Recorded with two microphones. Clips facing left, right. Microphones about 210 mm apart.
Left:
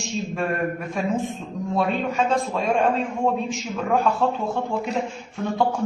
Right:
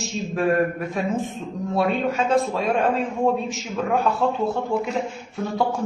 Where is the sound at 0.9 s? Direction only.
Centre (ahead or behind).